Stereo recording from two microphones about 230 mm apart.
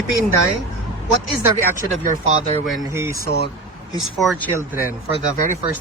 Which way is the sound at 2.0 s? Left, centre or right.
Right.